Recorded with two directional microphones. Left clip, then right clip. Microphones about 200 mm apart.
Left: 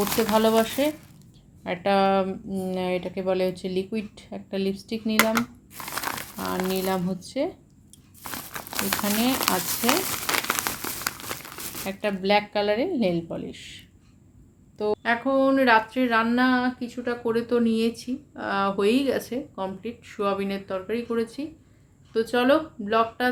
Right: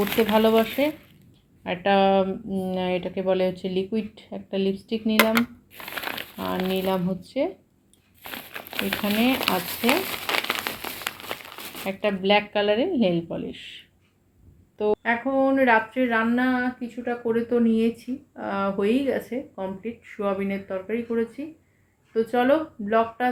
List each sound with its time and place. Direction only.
0.0 s speech: 45° left (ahead or behind)
1.6 s speech: centre (ahead or behind)
5.1 s speech: 20° left (ahead or behind)
5.7 s a sound: 55° left (ahead or behind)
6.8 s speech: centre (ahead or behind)
8.2 s crumpling: 55° left (ahead or behind)
11.9 s speech: centre (ahead or behind)
14.8 s speech: centre (ahead or behind)